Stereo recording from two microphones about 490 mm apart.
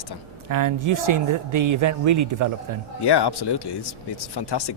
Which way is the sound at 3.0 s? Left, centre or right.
Left.